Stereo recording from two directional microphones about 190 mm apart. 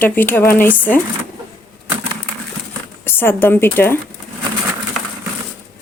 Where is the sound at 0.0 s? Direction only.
10° left (ahead or behind).